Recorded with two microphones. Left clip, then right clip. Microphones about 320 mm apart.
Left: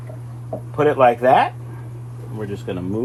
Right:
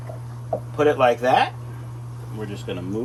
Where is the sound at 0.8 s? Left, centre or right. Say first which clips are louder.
Left 3 dB; centre.